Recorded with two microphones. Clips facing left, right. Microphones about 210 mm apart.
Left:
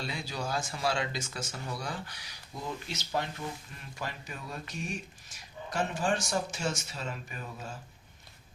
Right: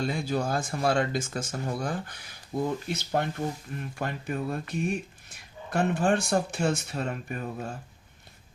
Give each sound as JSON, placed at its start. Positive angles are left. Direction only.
{"t": 0.0, "sound": "speech", "side_deg": -50}